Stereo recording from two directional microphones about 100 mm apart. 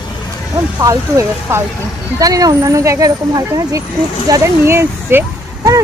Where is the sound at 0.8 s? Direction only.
30° right (ahead or behind).